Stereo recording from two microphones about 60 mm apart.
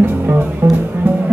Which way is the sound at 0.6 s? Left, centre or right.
Right.